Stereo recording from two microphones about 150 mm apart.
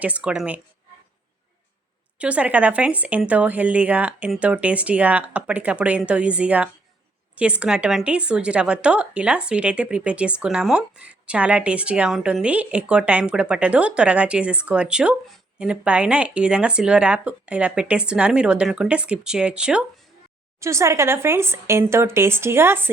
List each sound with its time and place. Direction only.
0.0 s a woman's voice: 10° right (ahead or behind)
2.1 s a woman's voice: 10° right (ahead or behind)
20.6 s a woman's voice: 20° right (ahead or behind)